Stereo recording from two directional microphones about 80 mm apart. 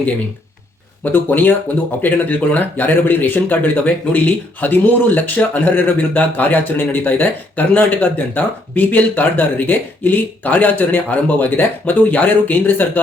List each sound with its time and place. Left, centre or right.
1.1 s speech: left